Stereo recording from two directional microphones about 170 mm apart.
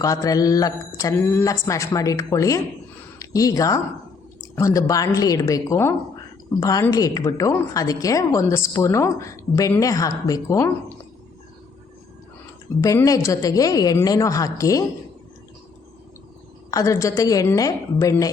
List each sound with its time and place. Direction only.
0.0 s a woman's voice: 20° left (ahead or behind)
12.8 s a woman's voice: 20° left (ahead or behind)
16.7 s a woman's voice: 20° left (ahead or behind)